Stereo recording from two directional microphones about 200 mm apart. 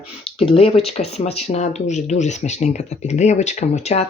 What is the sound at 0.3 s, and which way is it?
Speech, 30° left (ahead or behind).